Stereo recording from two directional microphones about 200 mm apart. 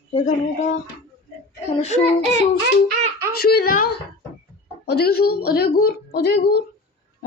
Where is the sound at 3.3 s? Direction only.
50° left (ahead or behind).